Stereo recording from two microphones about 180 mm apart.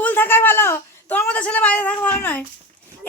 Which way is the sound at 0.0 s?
10° left (ahead or behind).